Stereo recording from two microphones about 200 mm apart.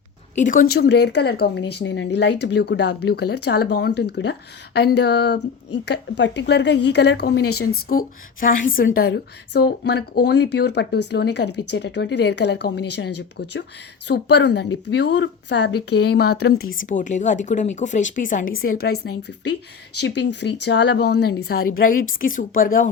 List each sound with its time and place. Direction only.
0.3 s speech: 40° left (ahead or behind)
16.8 s speech: 40° left (ahead or behind)
20.0 s speech: 60° left (ahead or behind); by 22.9 s 45° left (ahead or behind)